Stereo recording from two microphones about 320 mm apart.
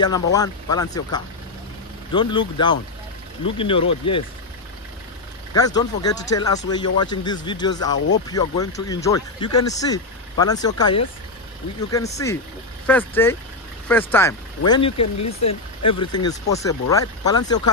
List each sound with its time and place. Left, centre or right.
0.0 s speech: centre
5.5 s speech: centre
16.0 s speech: centre